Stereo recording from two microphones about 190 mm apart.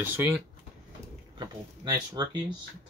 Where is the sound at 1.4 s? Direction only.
20° right (ahead or behind).